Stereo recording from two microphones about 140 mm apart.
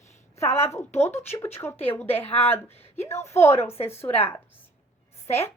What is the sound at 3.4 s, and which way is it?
Speech, 15° left (ahead or behind).